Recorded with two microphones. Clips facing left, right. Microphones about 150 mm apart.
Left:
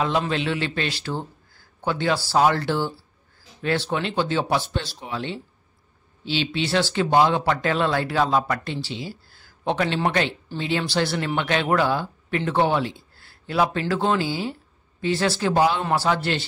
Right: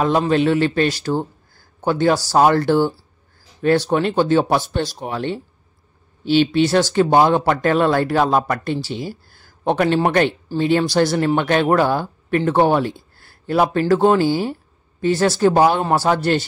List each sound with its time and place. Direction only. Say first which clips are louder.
0.3 s speech: right 9 dB; 45° right (ahead or behind)